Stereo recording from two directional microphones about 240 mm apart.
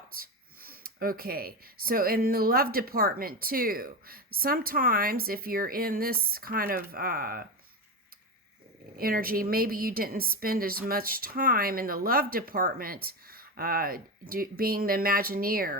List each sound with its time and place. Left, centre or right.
0.1 s a woman's voice: right
9.0 s a woman's voice: right